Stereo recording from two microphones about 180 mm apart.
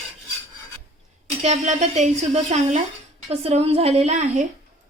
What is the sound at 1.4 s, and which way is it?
Speech, 40° right (ahead or behind).